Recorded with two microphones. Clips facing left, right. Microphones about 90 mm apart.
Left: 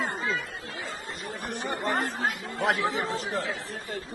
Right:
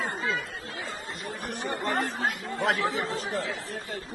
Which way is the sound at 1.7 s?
20° left (ahead or behind).